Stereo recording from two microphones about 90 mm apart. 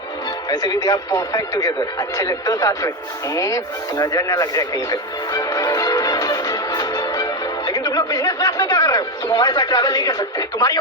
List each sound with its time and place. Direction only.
0.5 s speech: 45° left (ahead or behind)
3.3 s radio: 40° left (ahead or behind)
7.7 s a sound: 45° left (ahead or behind)